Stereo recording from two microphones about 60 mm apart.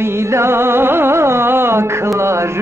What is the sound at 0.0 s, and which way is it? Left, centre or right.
Music, right.